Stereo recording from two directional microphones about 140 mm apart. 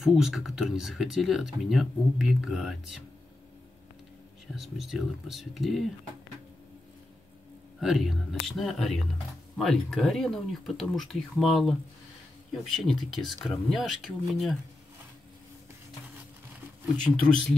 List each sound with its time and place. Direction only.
0.0 s speech: centre (ahead or behind)
4.6 s speech: centre (ahead or behind)
7.8 s speech: centre (ahead or behind)
16.9 s speech: 5° left (ahead or behind)